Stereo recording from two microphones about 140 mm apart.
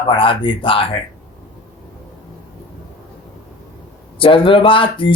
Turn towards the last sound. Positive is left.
turn(degrees=40)  # may be behind; listen again after turning